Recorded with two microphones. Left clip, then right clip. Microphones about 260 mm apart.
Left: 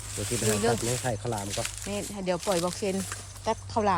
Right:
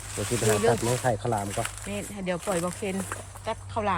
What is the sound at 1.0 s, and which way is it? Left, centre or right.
Speech, right.